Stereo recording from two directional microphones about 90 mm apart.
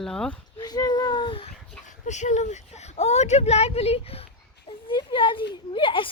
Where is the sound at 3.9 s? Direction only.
90° left.